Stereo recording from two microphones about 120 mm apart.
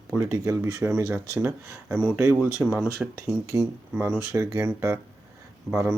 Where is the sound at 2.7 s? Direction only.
10° right (ahead or behind).